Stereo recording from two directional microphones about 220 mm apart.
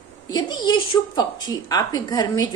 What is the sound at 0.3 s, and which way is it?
A woman's voice, 20° left (ahead or behind).